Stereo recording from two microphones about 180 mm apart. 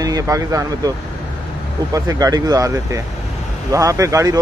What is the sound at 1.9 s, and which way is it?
Speech, 20° right (ahead or behind).